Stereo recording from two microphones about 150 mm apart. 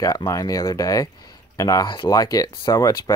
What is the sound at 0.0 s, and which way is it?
Speech, 25° left (ahead or behind).